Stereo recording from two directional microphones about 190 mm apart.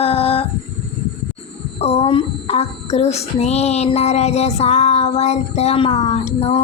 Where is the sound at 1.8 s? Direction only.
35° left (ahead or behind).